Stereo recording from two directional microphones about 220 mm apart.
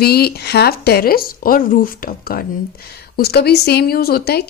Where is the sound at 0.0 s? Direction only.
45° left (ahead or behind).